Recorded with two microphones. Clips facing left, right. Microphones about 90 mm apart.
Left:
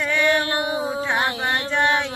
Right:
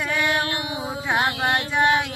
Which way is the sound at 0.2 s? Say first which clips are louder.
Left 5 dB; 35° left (ahead or behind).